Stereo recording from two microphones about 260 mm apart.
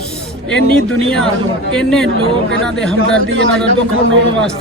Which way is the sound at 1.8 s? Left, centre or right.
Centre.